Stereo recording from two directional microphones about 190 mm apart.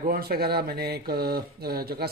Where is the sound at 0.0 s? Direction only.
50° right (ahead or behind).